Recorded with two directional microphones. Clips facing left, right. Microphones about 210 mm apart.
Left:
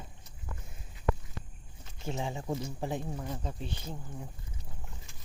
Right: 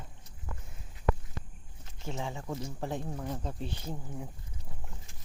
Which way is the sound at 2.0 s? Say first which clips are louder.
Left 2 dB; 15° left (ahead or behind).